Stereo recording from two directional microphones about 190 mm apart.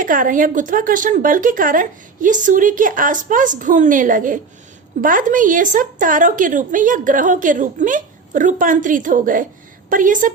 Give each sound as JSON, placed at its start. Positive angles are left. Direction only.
{"t": 0.0, "sound": "a woman's voice", "side_deg": -45}